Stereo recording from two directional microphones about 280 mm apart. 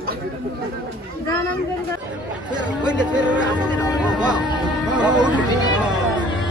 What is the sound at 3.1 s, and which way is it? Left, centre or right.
Music, centre.